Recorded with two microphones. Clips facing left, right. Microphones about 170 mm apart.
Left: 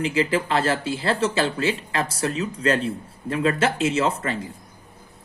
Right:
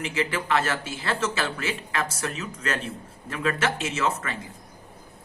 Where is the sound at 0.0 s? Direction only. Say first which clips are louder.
Left 6 dB; 30° left (ahead or behind).